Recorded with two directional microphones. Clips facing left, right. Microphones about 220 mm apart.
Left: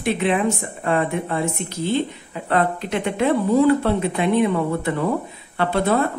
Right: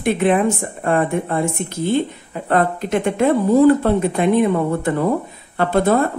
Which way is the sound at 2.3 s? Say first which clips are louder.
Right 3 dB; 45° right (ahead or behind).